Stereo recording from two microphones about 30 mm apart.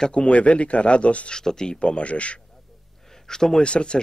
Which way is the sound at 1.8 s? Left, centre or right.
Left.